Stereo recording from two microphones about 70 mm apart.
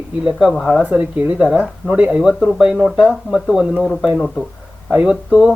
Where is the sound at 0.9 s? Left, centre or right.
Centre.